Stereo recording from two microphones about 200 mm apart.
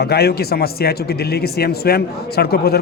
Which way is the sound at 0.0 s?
55° left (ahead or behind).